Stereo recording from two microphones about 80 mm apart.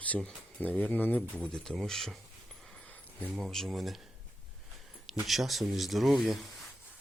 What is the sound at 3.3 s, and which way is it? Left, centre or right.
Speech, centre.